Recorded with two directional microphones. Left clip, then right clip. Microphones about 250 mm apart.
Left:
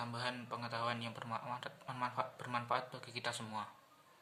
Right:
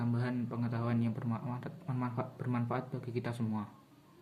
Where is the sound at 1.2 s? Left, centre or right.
Left.